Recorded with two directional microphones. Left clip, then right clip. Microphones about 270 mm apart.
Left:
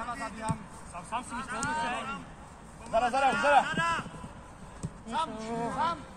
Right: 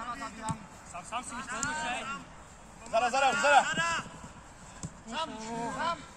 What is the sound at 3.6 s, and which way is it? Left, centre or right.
Speech, centre.